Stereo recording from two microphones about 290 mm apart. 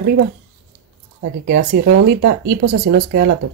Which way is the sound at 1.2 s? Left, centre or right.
Right.